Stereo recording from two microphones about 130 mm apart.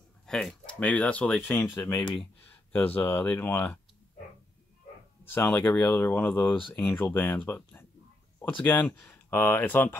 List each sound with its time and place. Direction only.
0.3 s speech: 5° left (ahead or behind)
5.2 s speech: 15° left (ahead or behind)